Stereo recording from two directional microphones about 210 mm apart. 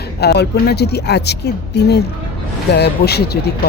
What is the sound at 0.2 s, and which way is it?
Speech, 50° left (ahead or behind).